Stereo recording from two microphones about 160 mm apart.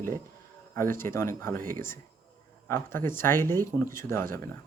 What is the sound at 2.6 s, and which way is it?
Speech, 15° left (ahead or behind).